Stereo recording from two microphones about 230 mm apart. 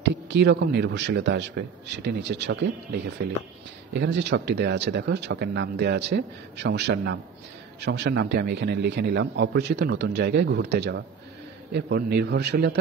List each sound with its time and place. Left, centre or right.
0.0 s a man's voice: right